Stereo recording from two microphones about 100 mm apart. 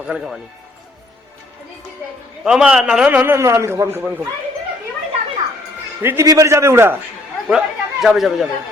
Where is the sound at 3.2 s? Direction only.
25° right (ahead or behind).